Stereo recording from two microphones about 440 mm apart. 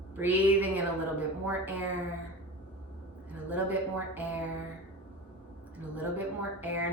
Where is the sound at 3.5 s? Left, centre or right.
Centre.